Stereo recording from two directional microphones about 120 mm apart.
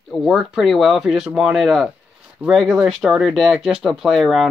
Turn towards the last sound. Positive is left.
turn(degrees=0)  # may be behind; listen again after turning